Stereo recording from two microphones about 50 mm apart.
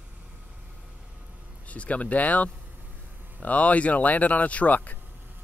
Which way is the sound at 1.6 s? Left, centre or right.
Left.